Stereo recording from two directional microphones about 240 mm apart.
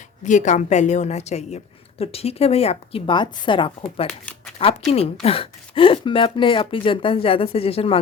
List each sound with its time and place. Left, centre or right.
0.3 s a woman's voice: left